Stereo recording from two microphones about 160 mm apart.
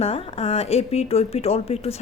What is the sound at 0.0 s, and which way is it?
A woman's voice, 40° left (ahead or behind).